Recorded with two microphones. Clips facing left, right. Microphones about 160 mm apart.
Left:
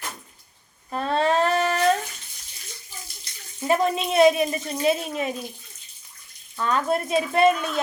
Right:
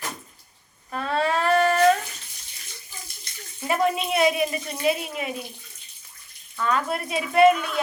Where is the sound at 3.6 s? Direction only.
25° left (ahead or behind).